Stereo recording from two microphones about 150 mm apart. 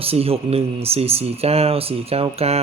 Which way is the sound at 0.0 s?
40° right (ahead or behind).